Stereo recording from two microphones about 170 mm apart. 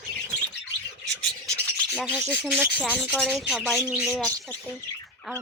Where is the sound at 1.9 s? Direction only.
10° left (ahead or behind).